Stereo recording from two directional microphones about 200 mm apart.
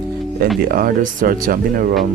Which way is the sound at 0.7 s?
45° right (ahead or behind).